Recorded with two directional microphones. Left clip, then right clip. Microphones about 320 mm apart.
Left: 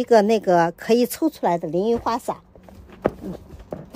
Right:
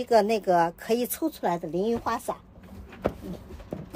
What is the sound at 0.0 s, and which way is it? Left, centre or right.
Speech, left.